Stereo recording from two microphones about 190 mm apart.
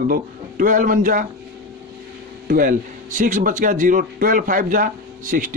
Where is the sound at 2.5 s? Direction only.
45° right (ahead or behind).